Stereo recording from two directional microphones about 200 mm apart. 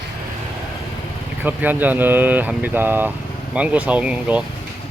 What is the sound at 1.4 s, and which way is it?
Speech, 10° right (ahead or behind).